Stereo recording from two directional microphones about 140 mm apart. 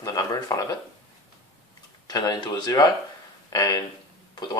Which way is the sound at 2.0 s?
30° left (ahead or behind).